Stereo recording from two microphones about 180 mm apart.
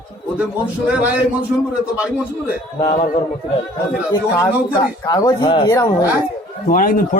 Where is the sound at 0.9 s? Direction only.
10° right (ahead or behind).